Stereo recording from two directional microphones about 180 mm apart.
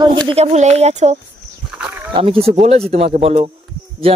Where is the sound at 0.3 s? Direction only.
35° right (ahead or behind).